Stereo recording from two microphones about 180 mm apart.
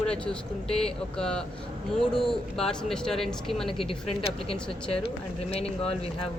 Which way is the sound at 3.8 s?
30° left (ahead or behind).